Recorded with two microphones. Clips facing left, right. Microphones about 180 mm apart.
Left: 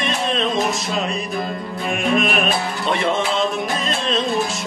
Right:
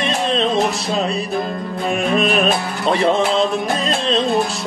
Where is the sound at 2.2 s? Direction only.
35° right (ahead or behind).